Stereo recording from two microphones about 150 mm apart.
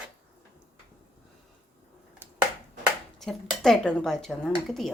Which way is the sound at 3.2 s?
Centre (ahead or behind).